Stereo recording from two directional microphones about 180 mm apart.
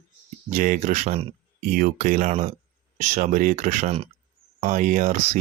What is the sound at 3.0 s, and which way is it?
Speech, 45° right (ahead or behind).